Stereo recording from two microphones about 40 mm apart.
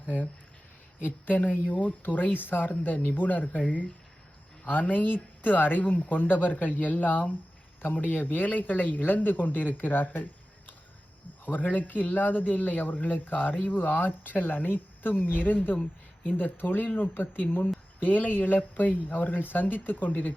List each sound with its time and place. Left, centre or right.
0.0 s speech: left
11.4 s speech: left